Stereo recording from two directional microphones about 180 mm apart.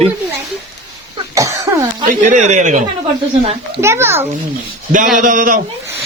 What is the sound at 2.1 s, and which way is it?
Speech, 45° right (ahead or behind).